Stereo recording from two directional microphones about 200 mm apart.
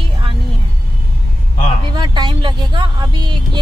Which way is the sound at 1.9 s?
20° right (ahead or behind).